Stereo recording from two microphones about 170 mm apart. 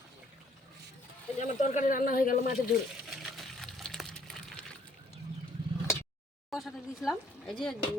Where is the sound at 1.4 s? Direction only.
45° left (ahead or behind).